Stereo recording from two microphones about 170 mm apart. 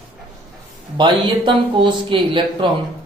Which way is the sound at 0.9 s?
30° right (ahead or behind).